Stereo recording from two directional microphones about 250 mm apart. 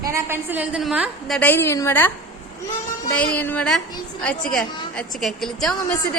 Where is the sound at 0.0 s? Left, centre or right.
Centre.